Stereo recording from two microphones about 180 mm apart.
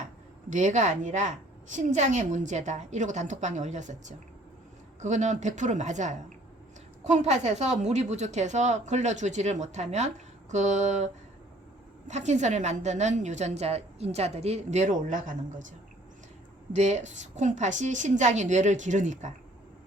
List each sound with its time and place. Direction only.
0.5 s a woman's voice: 40° right (ahead or behind)
4.9 s a woman's voice: 40° right (ahead or behind)
16.7 s a woman's voice: 40° right (ahead or behind)